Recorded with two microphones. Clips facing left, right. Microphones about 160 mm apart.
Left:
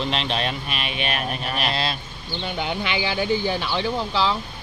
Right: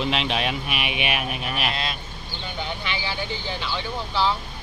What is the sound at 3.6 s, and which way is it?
Speech, 80° left.